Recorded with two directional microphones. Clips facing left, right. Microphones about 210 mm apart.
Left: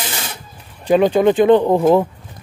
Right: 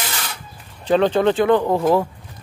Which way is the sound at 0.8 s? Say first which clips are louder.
Left 3 dB; 10° left (ahead or behind).